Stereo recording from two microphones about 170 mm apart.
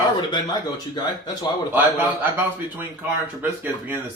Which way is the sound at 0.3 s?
25° left (ahead or behind).